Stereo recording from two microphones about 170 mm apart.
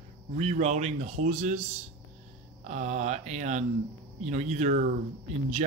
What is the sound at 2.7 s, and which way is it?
Speech, 45° right (ahead or behind).